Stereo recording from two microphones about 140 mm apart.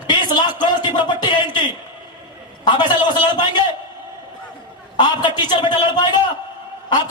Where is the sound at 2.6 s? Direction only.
30° left (ahead or behind).